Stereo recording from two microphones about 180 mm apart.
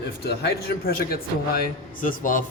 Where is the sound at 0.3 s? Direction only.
65° left (ahead or behind).